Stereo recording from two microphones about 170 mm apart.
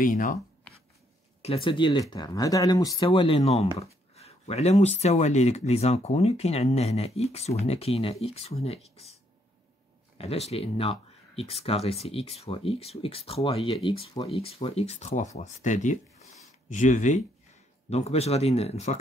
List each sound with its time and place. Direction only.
0.0 s speech: 50° left (ahead or behind)
1.4 s speech: 35° left (ahead or behind)